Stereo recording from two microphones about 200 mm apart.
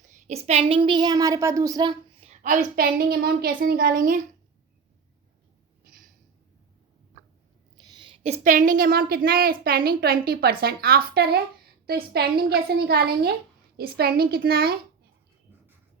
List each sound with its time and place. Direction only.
0.0 s a woman's voice: 35° right (ahead or behind)
2.3 s a woman's voice: 40° right (ahead or behind)
7.9 s a woman's voice: 25° right (ahead or behind); by 14.8 s 50° right (ahead or behind)